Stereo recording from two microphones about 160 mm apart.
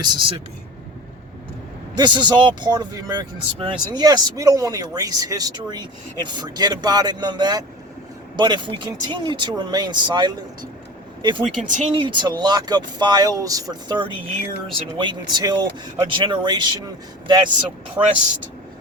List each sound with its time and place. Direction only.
0.0 s speech: 30° right (ahead or behind)
2.0 s speech: 30° right (ahead or behind)
11.5 s speech: 55° right (ahead or behind)
11.9 s speech: 30° right (ahead or behind)
18.0 s speech: 15° right (ahead or behind)